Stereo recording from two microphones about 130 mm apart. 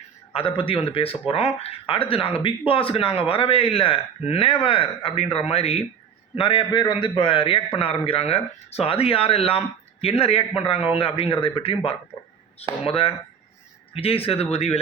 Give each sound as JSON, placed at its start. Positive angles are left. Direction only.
{"t": 0.3, "sound": "a man's voice", "side_deg": 45}